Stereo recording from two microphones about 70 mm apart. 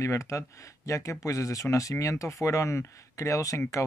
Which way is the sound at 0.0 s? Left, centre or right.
Left.